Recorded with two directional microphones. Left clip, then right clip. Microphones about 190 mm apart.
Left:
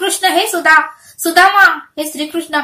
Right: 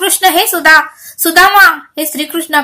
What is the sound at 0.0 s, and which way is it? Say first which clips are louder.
A woman's voice: right 3 dB; 40° right (ahead or behind).